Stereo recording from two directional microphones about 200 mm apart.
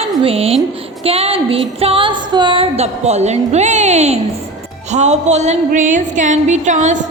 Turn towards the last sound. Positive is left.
turn(degrees=-40)  # may be behind; listen again after turning